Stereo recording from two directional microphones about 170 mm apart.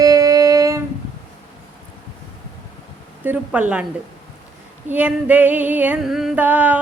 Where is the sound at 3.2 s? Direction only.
10° right (ahead or behind).